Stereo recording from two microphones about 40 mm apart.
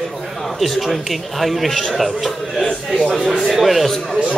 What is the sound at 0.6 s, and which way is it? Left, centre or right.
A man's voice, centre.